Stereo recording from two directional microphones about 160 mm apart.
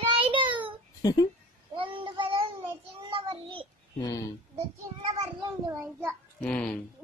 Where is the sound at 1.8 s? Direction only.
30° right (ahead or behind).